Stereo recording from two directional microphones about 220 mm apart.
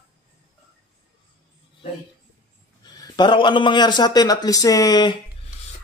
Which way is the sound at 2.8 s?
20° left (ahead or behind).